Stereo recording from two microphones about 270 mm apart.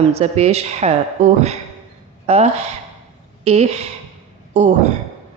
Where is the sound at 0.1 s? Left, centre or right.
Right.